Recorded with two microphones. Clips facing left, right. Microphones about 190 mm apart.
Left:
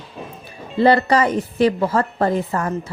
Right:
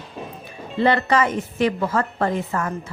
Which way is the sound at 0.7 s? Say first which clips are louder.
Left 4 dB; 35° left (ahead or behind).